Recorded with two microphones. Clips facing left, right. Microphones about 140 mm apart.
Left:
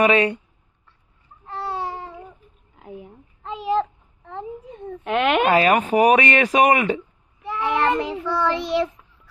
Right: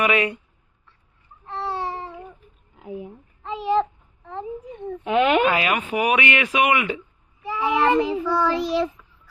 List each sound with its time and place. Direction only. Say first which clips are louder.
0.0 s speech: left 4 dB; 35° left (ahead or behind)
1.5 s a sound: even; centre (ahead or behind)
2.7 s babbling: right 4 dB; centre (ahead or behind)
4.9 s speech: right 1 dB; centre (ahead or behind)
5.5 s speech: left 5 dB; 40° left (ahead or behind)
7.4 s a child's voice: right 1 dB; centre (ahead or behind)